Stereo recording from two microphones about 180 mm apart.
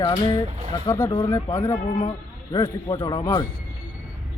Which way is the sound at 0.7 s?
15° left (ahead or behind).